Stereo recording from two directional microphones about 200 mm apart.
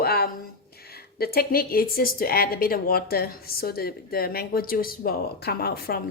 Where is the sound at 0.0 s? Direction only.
50° left (ahead or behind).